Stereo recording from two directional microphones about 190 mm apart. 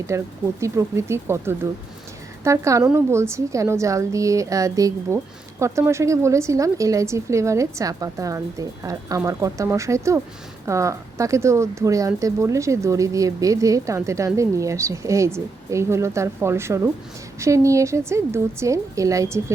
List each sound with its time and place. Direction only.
0.1 s a woman's voice: 15° right (ahead or behind)